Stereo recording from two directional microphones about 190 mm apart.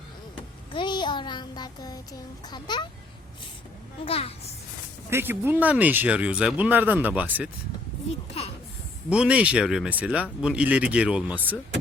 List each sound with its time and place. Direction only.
0.7 s music: 25° left (ahead or behind)
4.0 s a woman's voice: 30° left (ahead or behind)
5.1 s speech: 10° right (ahead or behind)
9.0 s speech: 5° right (ahead or behind)